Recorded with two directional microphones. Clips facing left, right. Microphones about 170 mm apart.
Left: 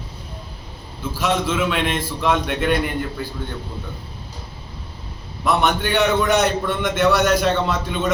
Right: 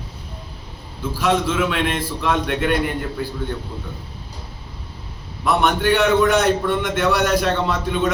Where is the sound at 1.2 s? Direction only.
5° left (ahead or behind).